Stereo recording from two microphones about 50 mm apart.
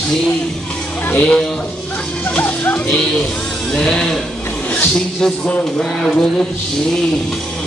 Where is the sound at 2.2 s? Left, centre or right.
Left.